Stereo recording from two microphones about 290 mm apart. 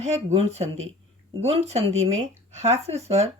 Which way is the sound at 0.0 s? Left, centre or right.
Right.